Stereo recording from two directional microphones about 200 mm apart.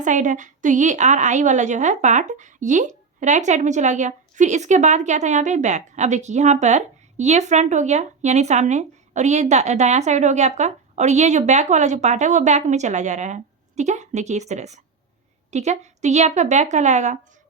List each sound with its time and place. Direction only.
0.0 s a woman's voice: 40° right (ahead or behind)